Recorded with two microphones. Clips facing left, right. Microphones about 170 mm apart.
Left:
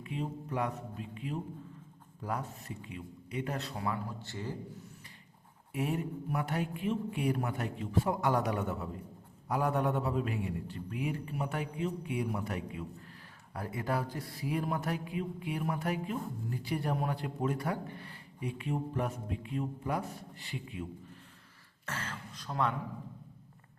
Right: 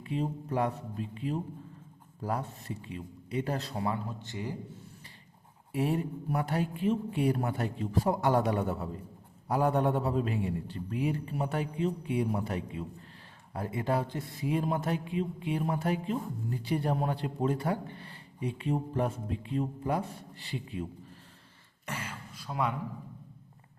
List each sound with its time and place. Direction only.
0.0 s a man's voice: 35° right (ahead or behind); by 4.5 s 15° right (ahead or behind)
5.7 s a man's voice: 35° right (ahead or behind)
21.8 s a man's voice: 10° right (ahead or behind)